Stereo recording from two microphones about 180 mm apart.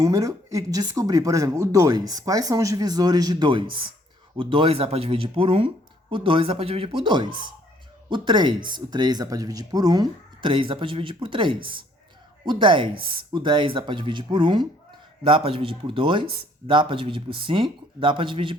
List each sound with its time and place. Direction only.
0.0 s speech: 20° right (ahead or behind)